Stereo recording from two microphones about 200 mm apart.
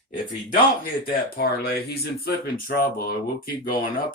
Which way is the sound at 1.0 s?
50° left (ahead or behind).